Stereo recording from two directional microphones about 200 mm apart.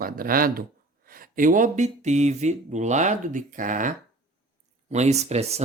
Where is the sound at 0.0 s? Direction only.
45° right (ahead or behind).